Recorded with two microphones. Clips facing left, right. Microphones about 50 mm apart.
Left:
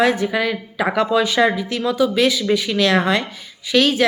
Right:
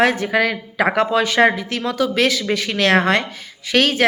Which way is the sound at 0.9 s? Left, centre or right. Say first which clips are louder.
Left 1 dB; right.